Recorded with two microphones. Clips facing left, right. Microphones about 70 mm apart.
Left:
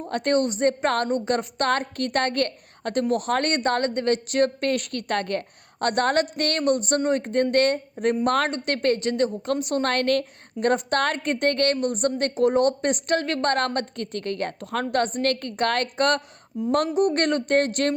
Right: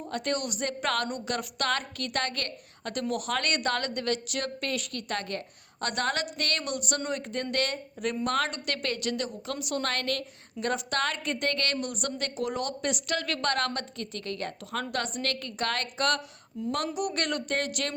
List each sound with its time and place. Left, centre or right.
0.1 s a woman's voice: left